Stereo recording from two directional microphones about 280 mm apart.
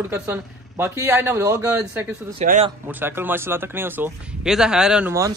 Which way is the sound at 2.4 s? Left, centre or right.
Right.